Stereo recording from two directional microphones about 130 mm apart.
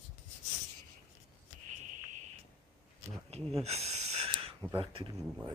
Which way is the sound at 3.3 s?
55° right (ahead or behind).